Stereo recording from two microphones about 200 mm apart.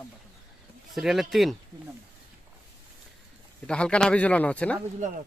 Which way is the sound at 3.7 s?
5° left (ahead or behind).